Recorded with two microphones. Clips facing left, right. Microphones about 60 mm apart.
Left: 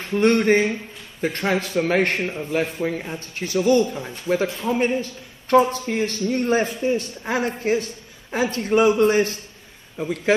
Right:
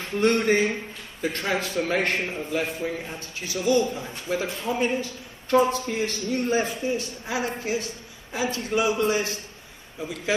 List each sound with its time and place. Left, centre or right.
0.1 s a man's voice: left
0.4 s a man's voice: left